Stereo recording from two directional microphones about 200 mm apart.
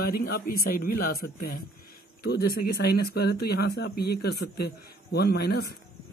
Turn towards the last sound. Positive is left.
turn(degrees=55)  # may be behind; listen again after turning